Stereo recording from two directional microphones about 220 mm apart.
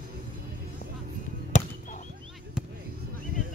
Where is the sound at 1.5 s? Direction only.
35° left (ahead or behind).